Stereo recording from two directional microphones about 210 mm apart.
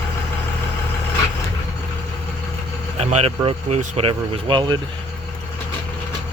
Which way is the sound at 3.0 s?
30° right (ahead or behind).